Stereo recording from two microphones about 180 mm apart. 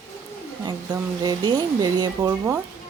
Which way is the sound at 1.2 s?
25° right (ahead or behind).